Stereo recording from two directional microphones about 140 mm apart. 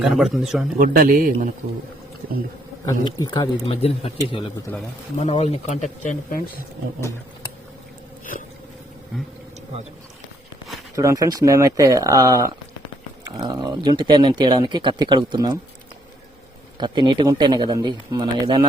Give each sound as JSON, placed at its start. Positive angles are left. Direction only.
{"t": 0.0, "sound": "a man's voice", "side_deg": -5}
{"t": 0.8, "sound": "speech", "side_deg": -90}
{"t": 3.0, "sound": "speech", "side_deg": 30}
{"t": 3.8, "sound": "speech", "side_deg": 45}
{"t": 10.9, "sound": "speech", "side_deg": -25}
{"t": 16.7, "sound": "speech", "side_deg": -35}